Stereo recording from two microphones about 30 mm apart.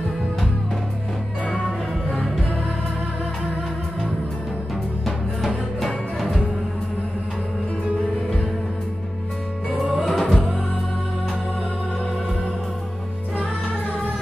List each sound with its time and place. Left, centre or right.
5.8 s music: centre
10.0 s music: centre